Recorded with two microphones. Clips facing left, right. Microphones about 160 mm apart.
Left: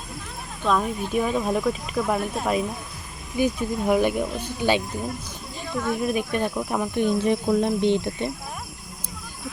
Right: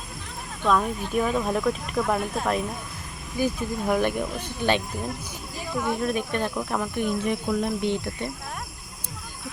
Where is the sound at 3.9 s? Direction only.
10° left (ahead or behind).